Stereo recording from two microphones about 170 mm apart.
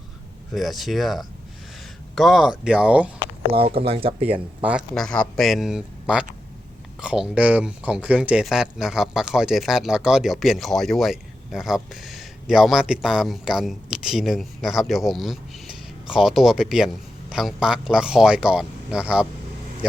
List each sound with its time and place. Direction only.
0.5 s speech: centre (ahead or behind)
3.7 s speech: 35° right (ahead or behind)
4.3 s speech: 10° right (ahead or behind)
4.9 s speech: 5° left (ahead or behind)